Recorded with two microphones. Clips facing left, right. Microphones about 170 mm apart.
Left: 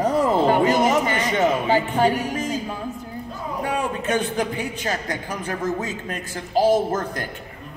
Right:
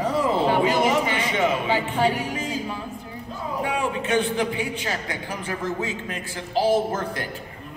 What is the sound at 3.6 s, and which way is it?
A man's voice, 45° left (ahead or behind).